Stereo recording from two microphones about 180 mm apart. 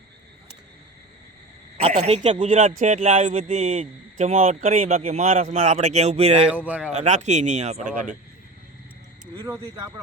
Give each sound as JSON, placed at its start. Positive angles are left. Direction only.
{"t": 2.0, "sound": "speech", "side_deg": -35}
{"t": 6.5, "sound": "speech", "side_deg": -10}
{"t": 6.9, "sound": "speech", "side_deg": -40}
{"t": 9.2, "sound": "a sound", "side_deg": -20}